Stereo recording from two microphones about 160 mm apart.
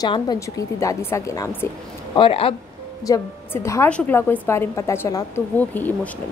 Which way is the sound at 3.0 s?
20° left (ahead or behind).